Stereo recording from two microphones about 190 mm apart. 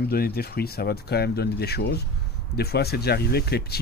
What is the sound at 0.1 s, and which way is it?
Speech, 55° left (ahead or behind).